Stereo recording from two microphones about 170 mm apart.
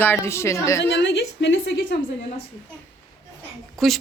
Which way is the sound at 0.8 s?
90° left.